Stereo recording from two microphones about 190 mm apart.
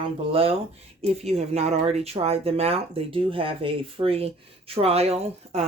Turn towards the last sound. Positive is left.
turn(degrees=-35)  # may be behind; listen again after turning